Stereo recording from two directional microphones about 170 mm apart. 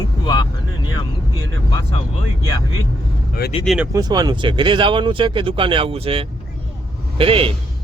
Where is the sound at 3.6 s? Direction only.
Centre (ahead or behind).